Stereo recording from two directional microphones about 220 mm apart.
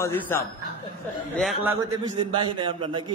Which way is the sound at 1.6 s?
10° right (ahead or behind).